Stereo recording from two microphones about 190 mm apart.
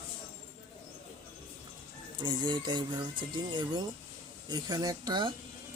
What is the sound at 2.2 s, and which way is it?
Speech, 25° right (ahead or behind).